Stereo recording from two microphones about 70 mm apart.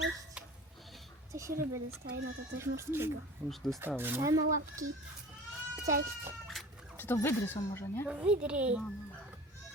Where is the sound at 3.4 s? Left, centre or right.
Centre.